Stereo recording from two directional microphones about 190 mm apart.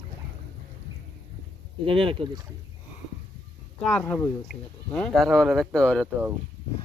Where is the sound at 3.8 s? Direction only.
5° left (ahead or behind).